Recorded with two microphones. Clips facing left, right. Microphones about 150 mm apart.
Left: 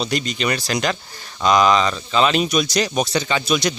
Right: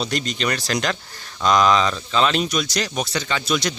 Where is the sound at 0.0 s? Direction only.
5° left (ahead or behind).